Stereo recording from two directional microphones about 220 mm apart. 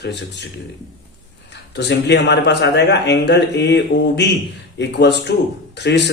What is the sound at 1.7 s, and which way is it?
Speech, 50° left (ahead or behind).